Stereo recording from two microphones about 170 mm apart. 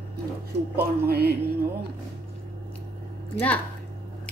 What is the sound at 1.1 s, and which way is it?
Music, 65° right (ahead or behind).